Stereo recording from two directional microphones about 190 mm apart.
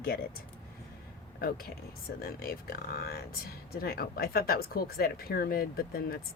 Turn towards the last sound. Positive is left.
turn(degrees=55)  # may be behind; listen again after turning